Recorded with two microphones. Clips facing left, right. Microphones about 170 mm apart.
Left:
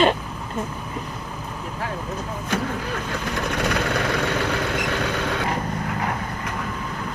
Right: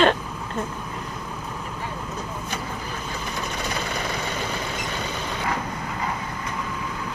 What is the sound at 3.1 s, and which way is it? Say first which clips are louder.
Vehicle: left 5 dB; 65° left (ahead or behind).